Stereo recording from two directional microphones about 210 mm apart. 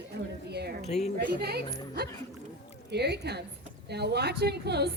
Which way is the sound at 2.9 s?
50° right (ahead or behind).